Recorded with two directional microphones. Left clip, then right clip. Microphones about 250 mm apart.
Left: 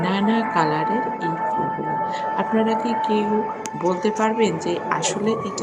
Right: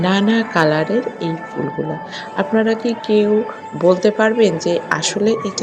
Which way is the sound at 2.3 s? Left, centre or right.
Centre.